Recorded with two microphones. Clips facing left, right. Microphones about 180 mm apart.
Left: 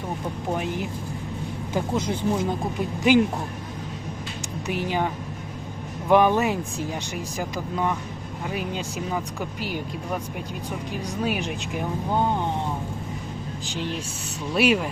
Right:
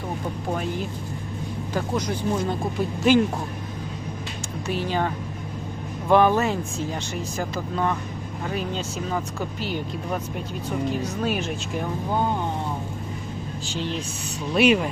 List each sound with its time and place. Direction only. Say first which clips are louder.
0.5 s speech: left 1 dB; 15° left (ahead or behind)
4.7 s speech: even; 15° left (ahead or behind)
13.7 s speech: right 1 dB; 15° left (ahead or behind)